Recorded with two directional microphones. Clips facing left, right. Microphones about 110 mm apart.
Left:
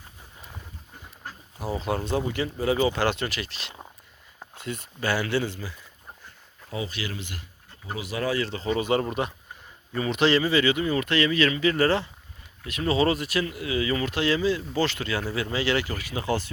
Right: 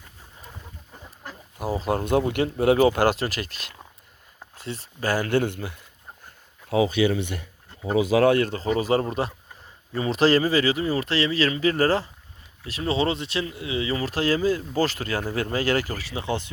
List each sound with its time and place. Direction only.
1.7 s speech: 40° right (ahead or behind); by 3.0 s 65° right (ahead or behind)
3.0 s speech: 40° right (ahead or behind)
4.5 s speech: 35° right (ahead or behind); by 5.7 s 55° right (ahead or behind)
6.7 s speech: 75° right (ahead or behind)
8.1 s speech: 65° right (ahead or behind); by 16.5 s 20° right (ahead or behind)